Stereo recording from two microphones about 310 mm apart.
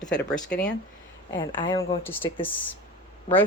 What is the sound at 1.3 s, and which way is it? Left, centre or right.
Speech, centre.